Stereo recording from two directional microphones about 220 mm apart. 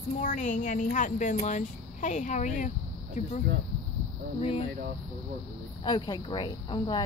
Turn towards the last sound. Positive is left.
turn(degrees=20)  # may be behind; listen again after turning